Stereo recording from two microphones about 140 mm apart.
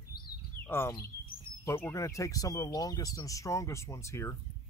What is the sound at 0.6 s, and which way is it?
Speech, 15° left (ahead or behind).